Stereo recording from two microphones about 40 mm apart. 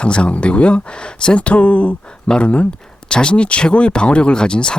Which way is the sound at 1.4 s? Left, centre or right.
Left.